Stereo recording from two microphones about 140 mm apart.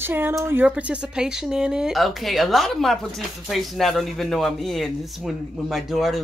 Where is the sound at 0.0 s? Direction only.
15° right (ahead or behind).